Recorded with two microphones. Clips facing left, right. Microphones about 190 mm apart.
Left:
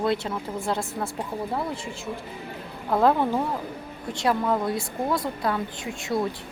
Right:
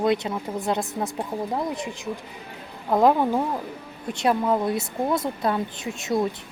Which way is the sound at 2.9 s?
15° right (ahead or behind).